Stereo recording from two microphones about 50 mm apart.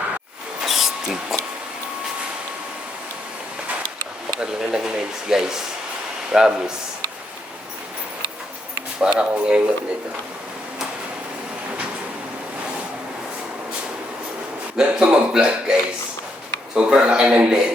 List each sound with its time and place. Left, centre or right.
0.6 s a sound: centre
4.4 s speech: centre
9.0 s speech: centre
14.8 s a man's voice: centre